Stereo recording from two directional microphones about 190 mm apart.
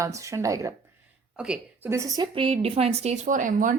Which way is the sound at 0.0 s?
15° right (ahead or behind).